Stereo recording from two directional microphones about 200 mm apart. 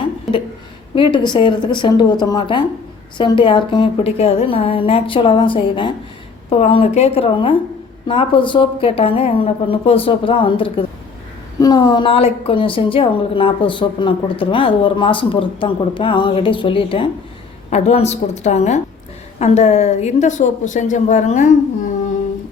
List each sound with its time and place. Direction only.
0.9 s a woman's voice: 25° left (ahead or behind)